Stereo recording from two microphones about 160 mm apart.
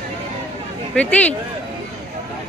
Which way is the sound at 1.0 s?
10° left (ahead or behind).